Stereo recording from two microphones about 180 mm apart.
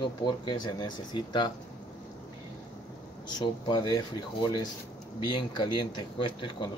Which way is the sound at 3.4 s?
25° left (ahead or behind).